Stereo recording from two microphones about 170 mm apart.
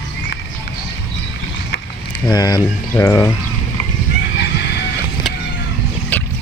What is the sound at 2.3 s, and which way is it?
Speech, 25° left (ahead or behind).